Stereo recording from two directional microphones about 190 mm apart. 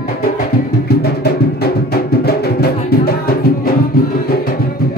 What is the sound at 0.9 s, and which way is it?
Music, 55° left (ahead or behind).